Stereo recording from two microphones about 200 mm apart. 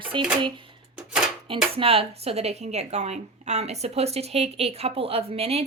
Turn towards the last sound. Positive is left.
turn(degrees=-30)  # may be behind; listen again after turning